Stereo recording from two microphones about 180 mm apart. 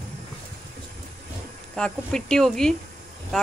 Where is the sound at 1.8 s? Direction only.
5° left (ahead or behind).